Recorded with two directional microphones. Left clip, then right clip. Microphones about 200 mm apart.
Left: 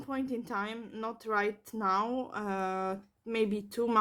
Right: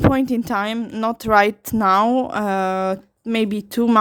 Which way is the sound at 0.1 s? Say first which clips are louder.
Right 15 dB; 50° right (ahead or behind).